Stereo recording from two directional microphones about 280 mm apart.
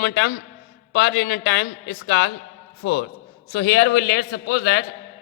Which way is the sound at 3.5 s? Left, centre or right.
Left.